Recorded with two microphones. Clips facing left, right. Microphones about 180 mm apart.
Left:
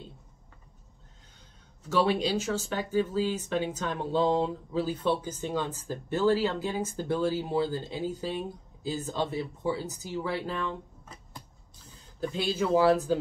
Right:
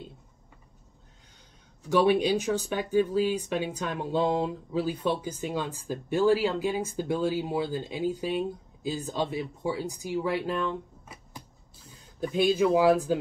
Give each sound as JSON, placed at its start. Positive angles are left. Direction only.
{"t": 1.8, "sound": "speech", "side_deg": -15}
{"t": 12.2, "sound": "speech", "side_deg": -15}